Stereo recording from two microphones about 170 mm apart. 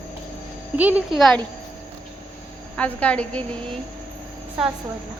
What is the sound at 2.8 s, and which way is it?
Speech, 5° left (ahead or behind).